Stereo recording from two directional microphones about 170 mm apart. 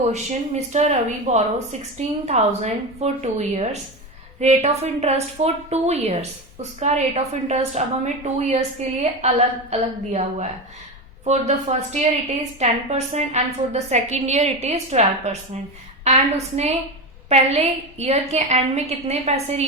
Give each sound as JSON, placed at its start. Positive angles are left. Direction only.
{"t": 0.1, "sound": "a woman's voice", "side_deg": -40}